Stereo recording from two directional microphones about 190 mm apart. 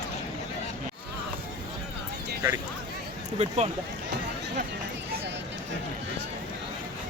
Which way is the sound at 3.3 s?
35° right (ahead or behind).